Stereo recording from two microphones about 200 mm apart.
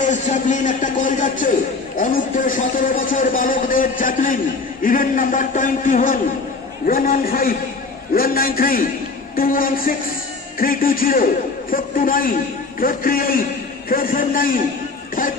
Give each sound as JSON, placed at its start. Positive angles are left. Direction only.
{"t": 0.0, "sound": "a man's voice", "side_deg": 40}